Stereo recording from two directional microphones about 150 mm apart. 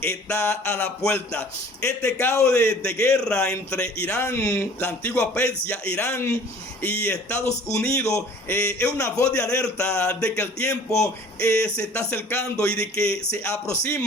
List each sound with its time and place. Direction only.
0.0 s a man's voice: 15° left (ahead or behind)
9.3 s a man's voice: 5° left (ahead or behind)